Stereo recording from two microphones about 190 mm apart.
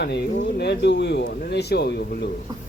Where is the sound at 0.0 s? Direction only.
60° left (ahead or behind).